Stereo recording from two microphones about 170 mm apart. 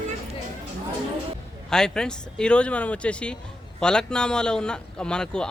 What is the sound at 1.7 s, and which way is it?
A man's voice, 5° left (ahead or behind).